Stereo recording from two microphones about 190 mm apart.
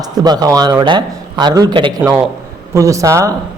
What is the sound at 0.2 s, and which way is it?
Speech, 20° right (ahead or behind).